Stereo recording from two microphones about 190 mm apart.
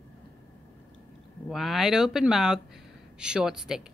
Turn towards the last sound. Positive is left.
turn(degrees=-5)  # may be behind; listen again after turning